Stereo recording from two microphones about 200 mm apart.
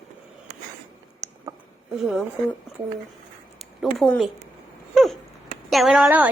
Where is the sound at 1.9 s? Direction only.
5° right (ahead or behind).